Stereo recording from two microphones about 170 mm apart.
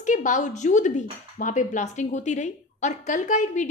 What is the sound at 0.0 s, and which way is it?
A woman's voice, 45° left (ahead or behind).